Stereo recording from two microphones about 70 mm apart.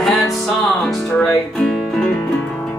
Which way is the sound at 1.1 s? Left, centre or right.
Centre.